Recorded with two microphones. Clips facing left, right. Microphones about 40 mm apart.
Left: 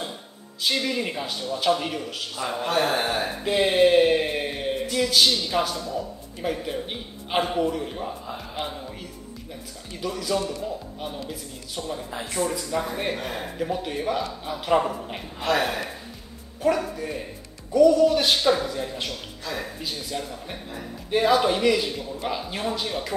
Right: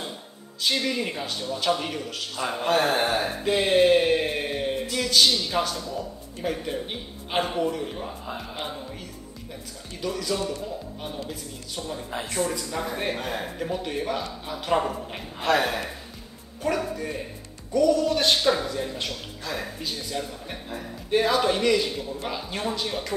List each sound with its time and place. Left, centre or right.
0.6 s a man's voice: centre
2.4 s speech: centre
2.9 s a sound: centre
4.9 s a man's voice: centre
9.9 s a man's voice: centre
16.6 s a man's voice: centre